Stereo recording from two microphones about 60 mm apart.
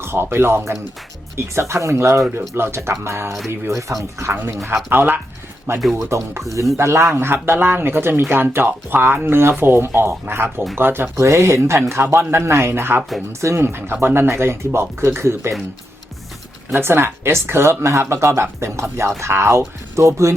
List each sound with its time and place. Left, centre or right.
0.0 s speech: right
2.6 s speech: right
3.7 s speech: right
4.9 s speech: right
6.0 s speech: right
7.1 s speech: right
11.2 s speech: right
16.7 s speech: right